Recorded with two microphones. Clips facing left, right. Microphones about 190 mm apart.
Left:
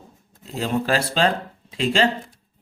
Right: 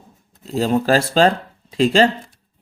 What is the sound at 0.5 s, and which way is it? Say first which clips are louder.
Speech: right 6 dB; 40° right (ahead or behind).